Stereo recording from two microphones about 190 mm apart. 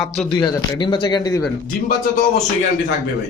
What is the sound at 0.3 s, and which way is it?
Speech, 25° left (ahead or behind).